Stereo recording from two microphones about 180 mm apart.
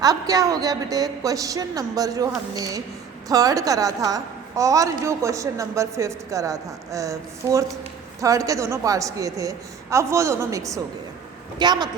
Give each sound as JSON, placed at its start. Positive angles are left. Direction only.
{"t": 0.0, "sound": "a woman's voice", "side_deg": -20}